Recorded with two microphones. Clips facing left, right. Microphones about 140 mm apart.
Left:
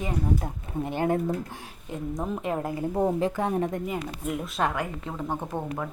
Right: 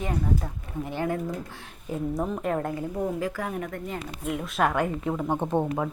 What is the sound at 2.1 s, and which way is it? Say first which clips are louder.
Speech: even; centre (ahead or behind).